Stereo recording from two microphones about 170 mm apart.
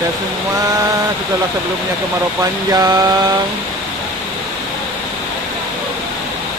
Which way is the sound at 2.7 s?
20° right (ahead or behind).